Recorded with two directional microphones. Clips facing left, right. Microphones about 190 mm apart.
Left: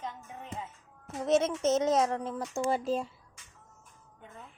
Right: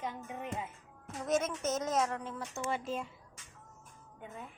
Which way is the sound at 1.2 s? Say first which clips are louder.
Left 6 dB; 30° left (ahead or behind).